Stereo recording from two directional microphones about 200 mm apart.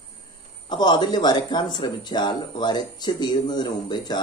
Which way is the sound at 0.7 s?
20° left (ahead or behind).